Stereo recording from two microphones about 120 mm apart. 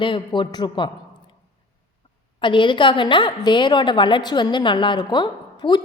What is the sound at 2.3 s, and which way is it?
A woman's voice, 45° left (ahead or behind).